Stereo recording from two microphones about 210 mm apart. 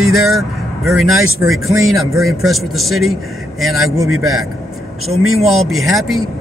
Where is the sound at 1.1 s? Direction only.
80° right.